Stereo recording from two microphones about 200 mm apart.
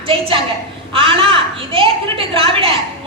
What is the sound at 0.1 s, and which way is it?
A woman's voice, 25° right (ahead or behind).